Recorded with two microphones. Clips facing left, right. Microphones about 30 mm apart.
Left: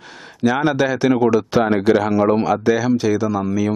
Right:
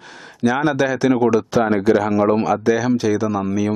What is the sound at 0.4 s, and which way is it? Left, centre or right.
Speech, centre.